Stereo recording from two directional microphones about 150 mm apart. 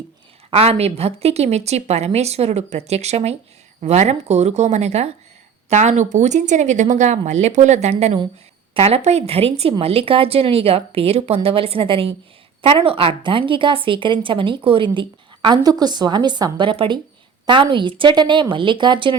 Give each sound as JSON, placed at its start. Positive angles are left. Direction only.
{"t": 0.5, "sound": "a woman's voice", "side_deg": -40}